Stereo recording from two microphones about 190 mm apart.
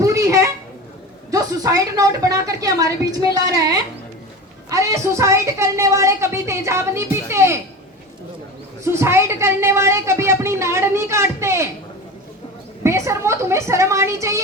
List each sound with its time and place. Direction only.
0.0 s a sound: 15° right (ahead or behind)
1.3 s a woman's voice: 20° right (ahead or behind)
8.8 s a woman's voice: 15° right (ahead or behind)
12.8 s a woman's voice: 15° right (ahead or behind)